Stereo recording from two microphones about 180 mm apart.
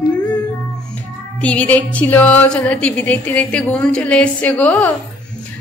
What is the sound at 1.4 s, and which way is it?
A woman's voice, 5° left (ahead or behind).